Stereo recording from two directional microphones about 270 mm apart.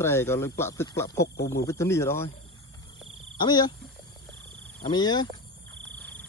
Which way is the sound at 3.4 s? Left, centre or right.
Centre.